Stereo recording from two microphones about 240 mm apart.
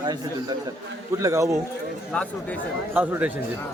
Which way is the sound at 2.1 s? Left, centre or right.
Centre.